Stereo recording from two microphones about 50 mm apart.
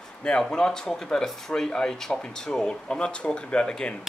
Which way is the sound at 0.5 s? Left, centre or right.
Centre.